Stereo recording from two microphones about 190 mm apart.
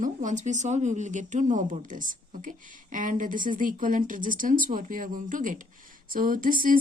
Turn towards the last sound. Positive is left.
turn(degrees=-45)  # may be behind; listen again after turning